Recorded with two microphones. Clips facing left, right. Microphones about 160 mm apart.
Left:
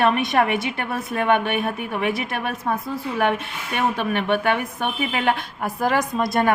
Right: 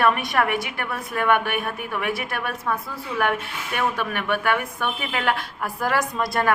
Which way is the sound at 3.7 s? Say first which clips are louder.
Left 3 dB; 20° left (ahead or behind).